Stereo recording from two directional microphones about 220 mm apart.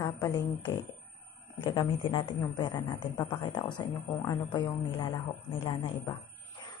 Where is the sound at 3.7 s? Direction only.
15° left (ahead or behind).